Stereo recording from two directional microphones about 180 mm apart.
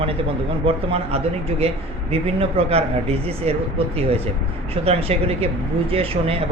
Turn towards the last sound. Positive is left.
turn(degrees=-35)  # may be behind; listen again after turning